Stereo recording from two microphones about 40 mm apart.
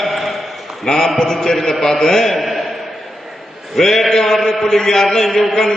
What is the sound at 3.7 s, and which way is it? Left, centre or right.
A man's voice, centre.